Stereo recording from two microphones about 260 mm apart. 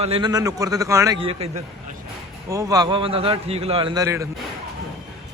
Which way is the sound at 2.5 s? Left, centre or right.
Centre.